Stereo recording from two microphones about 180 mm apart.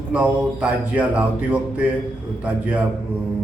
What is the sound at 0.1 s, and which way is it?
A man's voice, 5° right (ahead or behind).